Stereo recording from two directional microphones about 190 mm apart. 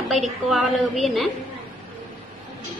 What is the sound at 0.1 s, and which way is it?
A woman's voice, centre (ahead or behind).